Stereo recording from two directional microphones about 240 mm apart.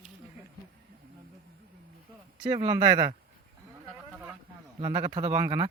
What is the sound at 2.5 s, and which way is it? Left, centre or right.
Speech, centre.